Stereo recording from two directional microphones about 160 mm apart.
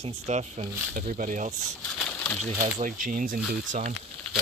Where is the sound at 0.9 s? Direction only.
55° right (ahead or behind).